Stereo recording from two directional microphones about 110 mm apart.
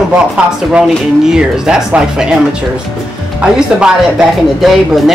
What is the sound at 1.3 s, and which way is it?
Speech, 5° right (ahead or behind).